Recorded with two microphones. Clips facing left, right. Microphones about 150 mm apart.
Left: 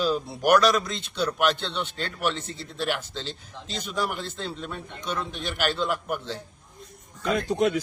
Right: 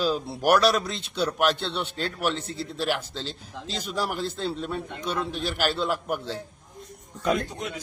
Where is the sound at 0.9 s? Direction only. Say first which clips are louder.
Even; 35° right (ahead or behind).